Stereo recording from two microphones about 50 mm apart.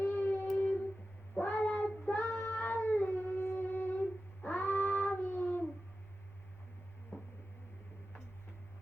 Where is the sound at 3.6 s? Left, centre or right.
Left.